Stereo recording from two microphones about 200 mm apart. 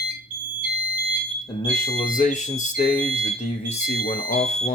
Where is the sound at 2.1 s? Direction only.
40° left (ahead or behind).